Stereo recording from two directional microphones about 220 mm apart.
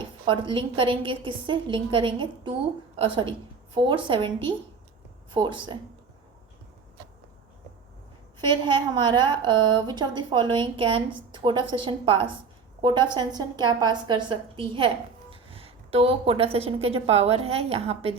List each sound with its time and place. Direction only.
0.0 s a woman's voice: 20° right (ahead or behind)
8.4 s a woman's voice: 20° right (ahead or behind)